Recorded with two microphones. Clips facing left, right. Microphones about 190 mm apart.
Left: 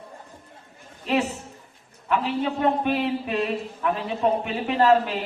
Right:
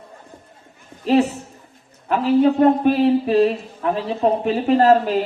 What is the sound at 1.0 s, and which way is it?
A man's voice, 35° right (ahead or behind).